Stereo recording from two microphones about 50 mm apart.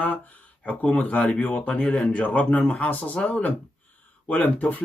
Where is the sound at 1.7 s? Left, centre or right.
Left.